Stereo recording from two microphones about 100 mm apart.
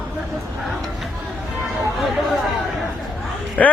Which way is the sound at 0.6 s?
Centre (ahead or behind).